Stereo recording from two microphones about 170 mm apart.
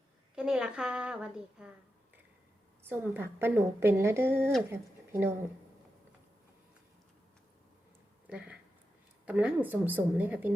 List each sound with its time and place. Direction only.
0.3 s a woman's voice: 5° right (ahead or behind)
2.8 s speech: 15° right (ahead or behind)
8.3 s speech: 5° right (ahead or behind)